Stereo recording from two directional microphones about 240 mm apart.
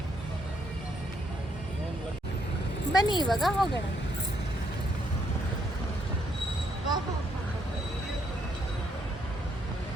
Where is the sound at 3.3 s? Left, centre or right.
Centre.